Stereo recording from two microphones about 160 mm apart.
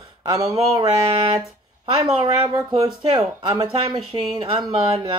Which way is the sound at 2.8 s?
20° right (ahead or behind).